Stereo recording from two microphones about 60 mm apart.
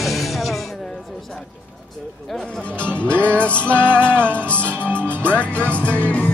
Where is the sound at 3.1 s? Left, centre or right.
Right.